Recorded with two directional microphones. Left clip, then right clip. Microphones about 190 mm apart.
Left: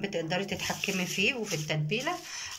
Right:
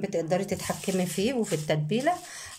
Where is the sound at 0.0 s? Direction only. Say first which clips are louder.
Right 4 dB; 30° right (ahead or behind).